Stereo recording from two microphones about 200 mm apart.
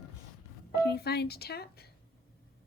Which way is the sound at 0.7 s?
50° left (ahead or behind).